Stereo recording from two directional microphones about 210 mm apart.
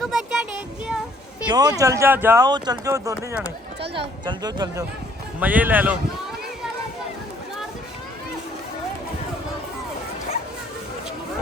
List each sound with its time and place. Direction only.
0.0 s a sound: centre (ahead or behind)
1.5 s speech: 20° right (ahead or behind)
5.4 s speech: 10° right (ahead or behind)